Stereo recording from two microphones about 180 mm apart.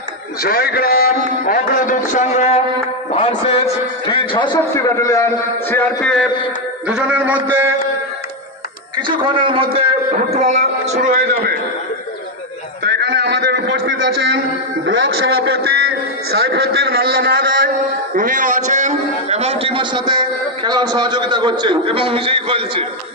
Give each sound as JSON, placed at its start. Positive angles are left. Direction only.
{"t": 0.4, "sound": "a man's voice", "side_deg": 55}
{"t": 6.9, "sound": "a man's voice", "side_deg": -5}
{"t": 9.0, "sound": "a man's voice", "side_deg": -25}
{"t": 12.8, "sound": "a sound", "side_deg": -70}
{"t": 14.9, "sound": "a man's voice", "side_deg": -70}